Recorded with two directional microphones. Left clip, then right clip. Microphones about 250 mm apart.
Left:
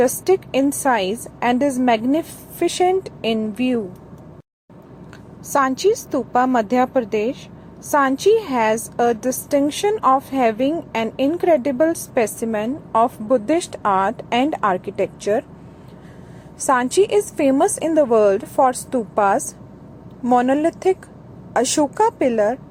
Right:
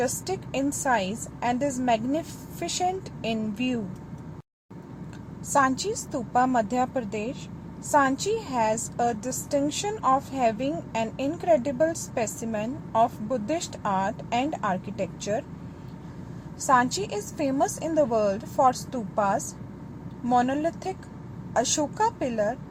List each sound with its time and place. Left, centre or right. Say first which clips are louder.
0.0 s a woman's voice: left 12 dB; left
5.5 s a woman's voice: left 7 dB; left
16.6 s a woman's voice: left 6 dB; left